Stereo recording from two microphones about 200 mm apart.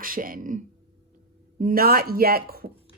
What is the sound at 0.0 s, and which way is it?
Speech, 45° right (ahead or behind).